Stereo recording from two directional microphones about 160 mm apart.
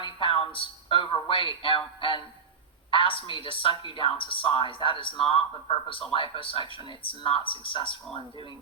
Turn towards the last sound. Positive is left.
turn(degrees=30)  # may be behind; listen again after turning